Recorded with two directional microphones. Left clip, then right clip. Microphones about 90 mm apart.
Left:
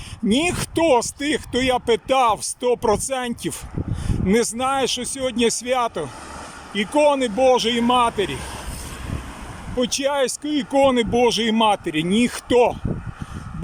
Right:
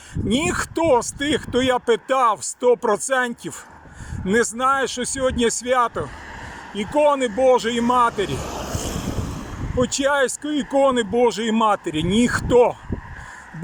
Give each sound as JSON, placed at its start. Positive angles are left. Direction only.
{"t": 0.3, "sound": "speech", "side_deg": 20}
{"t": 4.5, "sound": "speech", "side_deg": 20}
{"t": 9.7, "sound": "speech", "side_deg": 20}